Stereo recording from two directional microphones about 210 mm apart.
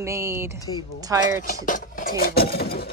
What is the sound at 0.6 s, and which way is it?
Speech, 20° left (ahead or behind).